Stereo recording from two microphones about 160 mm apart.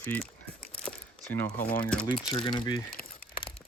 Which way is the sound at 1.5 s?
65° left (ahead or behind).